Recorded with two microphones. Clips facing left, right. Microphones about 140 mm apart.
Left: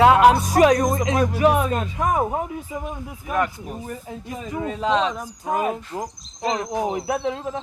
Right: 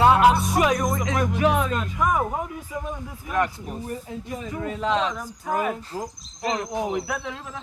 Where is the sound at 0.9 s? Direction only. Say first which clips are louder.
Left 4 dB; 25° left (ahead or behind).